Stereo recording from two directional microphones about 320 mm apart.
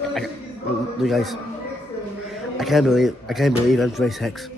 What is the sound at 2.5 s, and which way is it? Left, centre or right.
A man's voice, centre.